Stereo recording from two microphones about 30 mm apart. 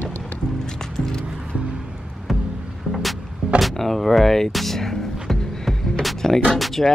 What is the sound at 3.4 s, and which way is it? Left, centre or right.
Door, centre.